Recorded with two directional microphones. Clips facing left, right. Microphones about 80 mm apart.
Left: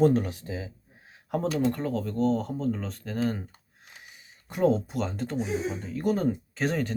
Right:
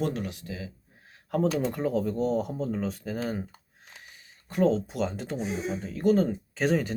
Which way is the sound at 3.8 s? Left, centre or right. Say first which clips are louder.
Even; centre.